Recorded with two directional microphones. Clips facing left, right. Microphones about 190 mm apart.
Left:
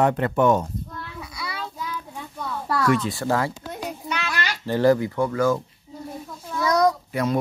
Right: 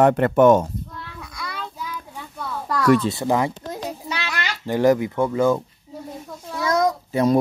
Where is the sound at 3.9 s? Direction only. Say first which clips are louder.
Left 2 dB; 35° right (ahead or behind).